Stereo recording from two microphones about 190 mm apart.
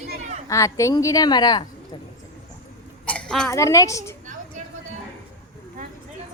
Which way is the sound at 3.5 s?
15° left (ahead or behind).